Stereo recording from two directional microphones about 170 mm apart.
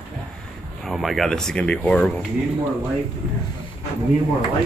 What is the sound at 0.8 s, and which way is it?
Speech, centre (ahead or behind).